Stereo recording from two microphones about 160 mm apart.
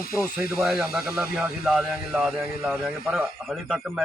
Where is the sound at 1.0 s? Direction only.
15° right (ahead or behind).